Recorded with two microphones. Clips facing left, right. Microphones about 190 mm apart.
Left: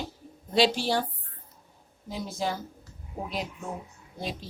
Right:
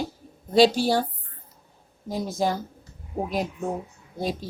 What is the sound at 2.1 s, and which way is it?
Speech, 40° right (ahead or behind).